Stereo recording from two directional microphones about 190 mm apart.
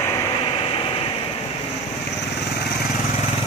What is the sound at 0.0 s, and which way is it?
Vehicle, 15° left (ahead or behind).